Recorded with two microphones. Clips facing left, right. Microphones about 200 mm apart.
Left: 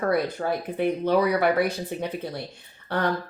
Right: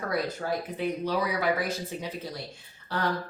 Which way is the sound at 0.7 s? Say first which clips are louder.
Left 9 dB; 60° left (ahead or behind).